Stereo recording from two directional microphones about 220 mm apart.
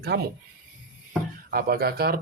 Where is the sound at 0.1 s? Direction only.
50° right (ahead or behind).